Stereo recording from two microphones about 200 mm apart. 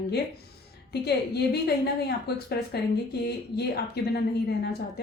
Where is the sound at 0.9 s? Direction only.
55° left (ahead or behind).